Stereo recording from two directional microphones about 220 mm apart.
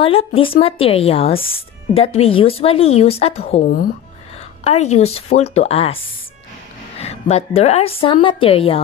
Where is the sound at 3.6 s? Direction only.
40° left (ahead or behind).